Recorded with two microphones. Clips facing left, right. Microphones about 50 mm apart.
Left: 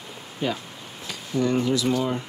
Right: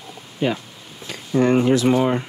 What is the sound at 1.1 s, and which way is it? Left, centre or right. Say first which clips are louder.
Speech: right 6 dB; right.